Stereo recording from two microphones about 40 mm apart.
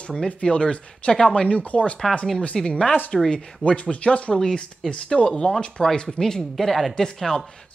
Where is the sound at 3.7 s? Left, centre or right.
Left.